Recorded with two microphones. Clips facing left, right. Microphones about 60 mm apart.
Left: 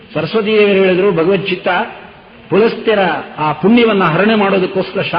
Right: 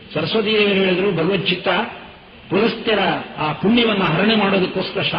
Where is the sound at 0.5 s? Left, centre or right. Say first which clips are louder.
Left 8 dB; left.